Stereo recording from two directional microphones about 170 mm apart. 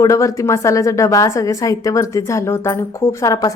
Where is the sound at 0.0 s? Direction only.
20° left (ahead or behind).